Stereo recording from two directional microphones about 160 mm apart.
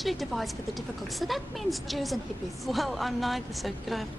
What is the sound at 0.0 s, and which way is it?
Speech, centre (ahead or behind).